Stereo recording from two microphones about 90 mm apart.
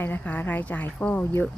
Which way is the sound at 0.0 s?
20° left (ahead or behind).